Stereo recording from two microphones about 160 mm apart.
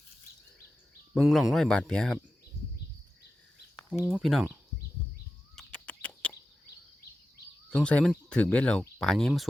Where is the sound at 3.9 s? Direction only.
5° right (ahead or behind).